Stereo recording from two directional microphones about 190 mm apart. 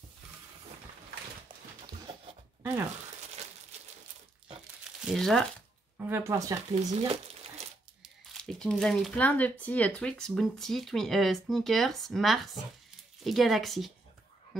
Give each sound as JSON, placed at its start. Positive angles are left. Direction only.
{"t": 1.9, "sound": "a sound", "side_deg": -25}
{"t": 2.6, "sound": "speech", "side_deg": -15}
{"t": 5.0, "sound": "speech", "side_deg": 0}
{"t": 5.9, "sound": "speech", "side_deg": -10}
{"t": 6.9, "sound": "a sound", "side_deg": -30}
{"t": 8.0, "sound": "speech", "side_deg": 0}